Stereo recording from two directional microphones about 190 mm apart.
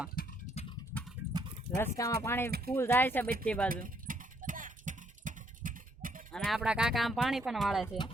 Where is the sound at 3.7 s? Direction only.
45° right (ahead or behind).